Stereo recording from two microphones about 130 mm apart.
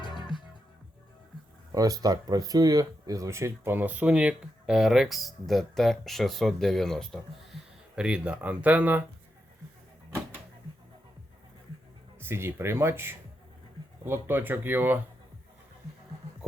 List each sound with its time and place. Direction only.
0.0 s music: 35° left (ahead or behind)
1.7 s speech: 30° right (ahead or behind); by 7.2 s 5° left (ahead or behind)
7.9 s speech: 10° right (ahead or behind)
12.2 s speech: 20° right (ahead or behind)